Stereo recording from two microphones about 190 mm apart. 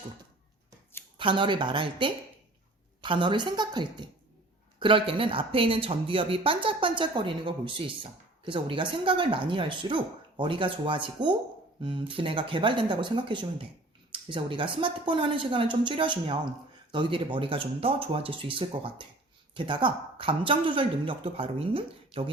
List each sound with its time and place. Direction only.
1.2 s speech: 25° right (ahead or behind)